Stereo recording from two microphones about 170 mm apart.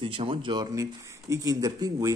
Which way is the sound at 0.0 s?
30° right (ahead or behind).